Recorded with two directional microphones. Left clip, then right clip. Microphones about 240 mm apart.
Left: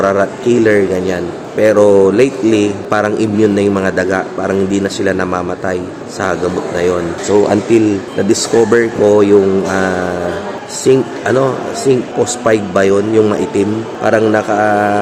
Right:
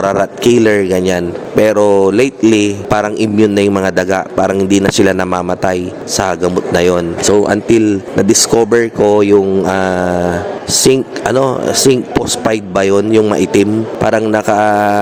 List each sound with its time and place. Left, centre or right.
0.0 s a man's voice: right